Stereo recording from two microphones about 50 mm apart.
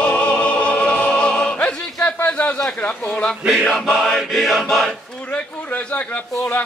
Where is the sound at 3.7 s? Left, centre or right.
Centre.